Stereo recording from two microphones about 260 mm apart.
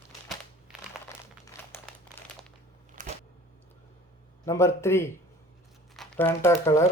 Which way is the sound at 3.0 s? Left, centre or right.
Right.